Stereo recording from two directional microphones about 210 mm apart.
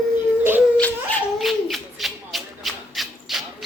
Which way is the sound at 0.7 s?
5° left (ahead or behind).